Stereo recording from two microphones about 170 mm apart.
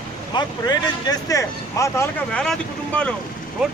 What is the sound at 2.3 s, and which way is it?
Speech, 5° left (ahead or behind).